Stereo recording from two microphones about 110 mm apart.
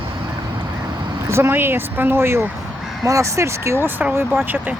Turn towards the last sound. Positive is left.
turn(degrees=-20)  # may be behind; listen again after turning